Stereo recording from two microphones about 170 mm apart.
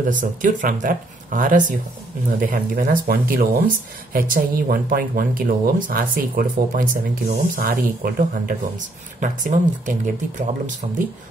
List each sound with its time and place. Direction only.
0.1 s speech: 50° right (ahead or behind)